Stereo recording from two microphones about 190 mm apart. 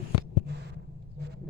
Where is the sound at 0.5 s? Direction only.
60° right (ahead or behind).